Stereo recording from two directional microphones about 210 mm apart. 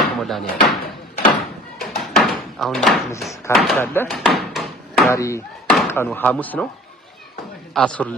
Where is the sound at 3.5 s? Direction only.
Centre (ahead or behind).